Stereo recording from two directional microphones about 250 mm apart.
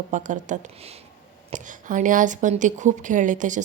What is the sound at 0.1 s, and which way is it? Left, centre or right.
A woman's voice, right.